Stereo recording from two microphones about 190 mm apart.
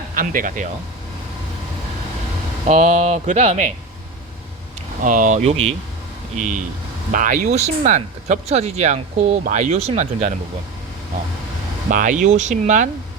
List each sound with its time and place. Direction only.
0.1 s speech: 45° right (ahead or behind)
2.6 s speech: 40° right (ahead or behind)
5.0 s speech: 45° right (ahead or behind)
7.1 s speech: 45° right (ahead or behind)
11.9 s speech: 45° right (ahead or behind)